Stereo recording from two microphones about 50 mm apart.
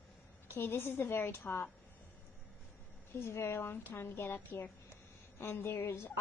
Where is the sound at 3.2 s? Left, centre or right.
Left.